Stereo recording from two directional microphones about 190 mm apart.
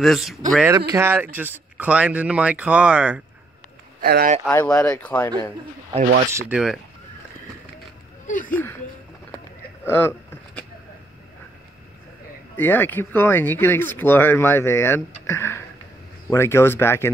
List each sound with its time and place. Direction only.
0.0 s speech: centre (ahead or behind)
0.6 s speech: 15° right (ahead or behind)
4.0 s speech: 50° right (ahead or behind)
4.5 s speech: 10° left (ahead or behind)
6.5 s speech: centre (ahead or behind)
8.3 s speech: 45° left (ahead or behind)
9.8 s a sound: 10° left (ahead or behind)
12.5 s speech: 10° left (ahead or behind)